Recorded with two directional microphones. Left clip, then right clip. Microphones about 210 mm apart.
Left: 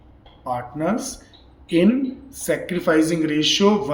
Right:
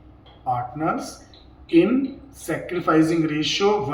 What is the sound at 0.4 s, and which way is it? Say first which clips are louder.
Speech: right 1 dB; 50° left (ahead or behind).